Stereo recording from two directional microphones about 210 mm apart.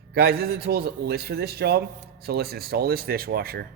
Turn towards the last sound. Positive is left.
turn(degrees=-45)  # may be behind; listen again after turning